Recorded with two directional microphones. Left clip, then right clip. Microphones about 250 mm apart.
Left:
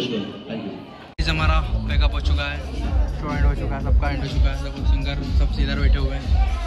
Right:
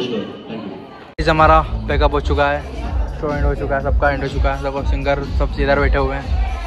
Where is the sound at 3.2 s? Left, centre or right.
Left.